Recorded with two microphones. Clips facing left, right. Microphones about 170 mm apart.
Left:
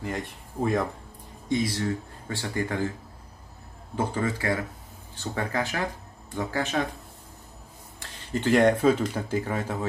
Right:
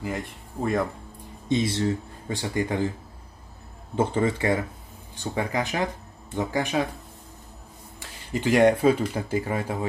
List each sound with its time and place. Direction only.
0.0 s speech: centre (ahead or behind)
1.5 s speech: 25° right (ahead or behind)
3.9 s speech: 25° right (ahead or behind)
8.0 s speech: 10° right (ahead or behind)